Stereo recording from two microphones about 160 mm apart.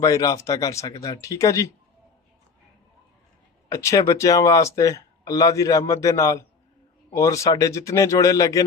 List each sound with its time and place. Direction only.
0.0 s speech: 20° left (ahead or behind)
3.6 s speech: 20° left (ahead or behind)